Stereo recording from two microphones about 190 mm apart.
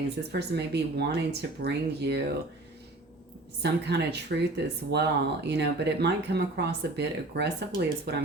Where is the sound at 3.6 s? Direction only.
60° right (ahead or behind).